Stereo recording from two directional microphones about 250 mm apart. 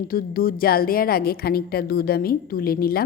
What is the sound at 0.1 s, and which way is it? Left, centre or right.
A woman's voice, left.